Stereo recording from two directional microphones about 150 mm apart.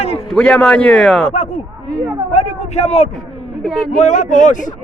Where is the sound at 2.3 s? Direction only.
45° left (ahead or behind).